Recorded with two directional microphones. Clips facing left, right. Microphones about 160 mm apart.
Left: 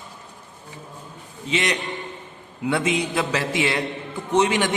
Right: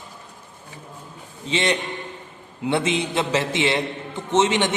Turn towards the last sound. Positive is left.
turn(degrees=-25)  # may be behind; listen again after turning